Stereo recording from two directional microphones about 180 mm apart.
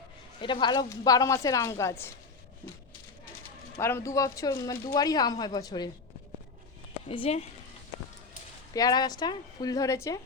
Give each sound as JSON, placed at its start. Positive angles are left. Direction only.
{"t": 0.4, "sound": "speech", "side_deg": 25}
{"t": 3.8, "sound": "speech", "side_deg": 15}
{"t": 7.1, "sound": "speech", "side_deg": 30}
{"t": 8.7, "sound": "speech", "side_deg": 20}